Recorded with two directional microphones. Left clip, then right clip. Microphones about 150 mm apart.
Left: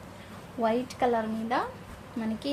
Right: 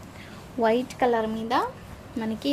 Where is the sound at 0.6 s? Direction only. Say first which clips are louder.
Right 4 dB; 55° right (ahead or behind).